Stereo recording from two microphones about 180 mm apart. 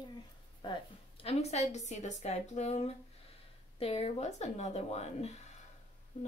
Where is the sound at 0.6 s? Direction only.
30° left (ahead or behind).